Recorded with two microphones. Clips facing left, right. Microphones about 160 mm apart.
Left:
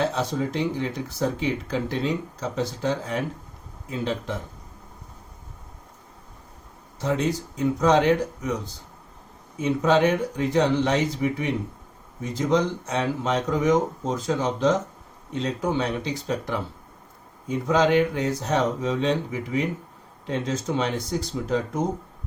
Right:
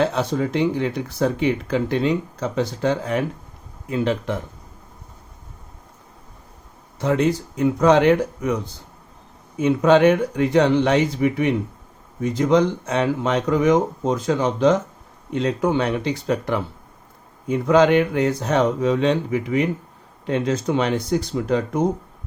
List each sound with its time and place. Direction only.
0.1 s speech: 60° right (ahead or behind)
7.0 s speech: 60° right (ahead or behind)
9.6 s speech: 60° right (ahead or behind)